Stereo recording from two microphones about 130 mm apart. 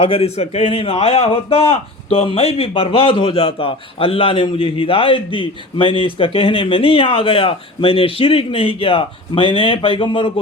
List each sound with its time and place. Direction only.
0.0 s a man's voice: 50° left (ahead or behind)